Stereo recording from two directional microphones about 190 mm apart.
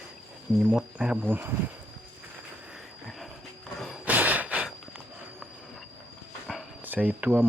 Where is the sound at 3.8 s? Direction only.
5° right (ahead or behind).